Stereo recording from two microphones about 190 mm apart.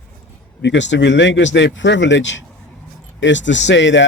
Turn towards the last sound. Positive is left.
turn(degrees=70)  # may be behind; listen again after turning